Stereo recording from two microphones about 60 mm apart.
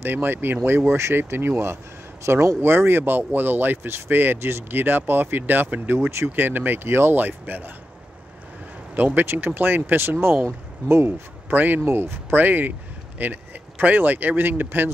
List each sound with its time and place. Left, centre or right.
0.0 s speech: right
2.6 s speech: right
6.3 s speech: right
8.9 s speech: right
11.5 s speech: right